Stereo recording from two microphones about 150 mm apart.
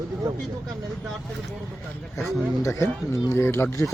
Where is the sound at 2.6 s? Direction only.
20° left (ahead or behind).